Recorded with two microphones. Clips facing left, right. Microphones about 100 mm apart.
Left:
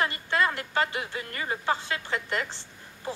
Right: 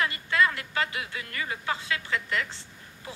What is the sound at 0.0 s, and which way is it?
A man's voice, 35° left (ahead or behind).